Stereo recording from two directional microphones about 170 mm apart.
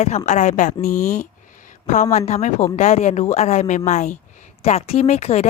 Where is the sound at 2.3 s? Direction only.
40° left (ahead or behind).